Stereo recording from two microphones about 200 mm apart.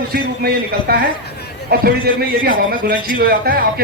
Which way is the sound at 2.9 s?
45° right (ahead or behind).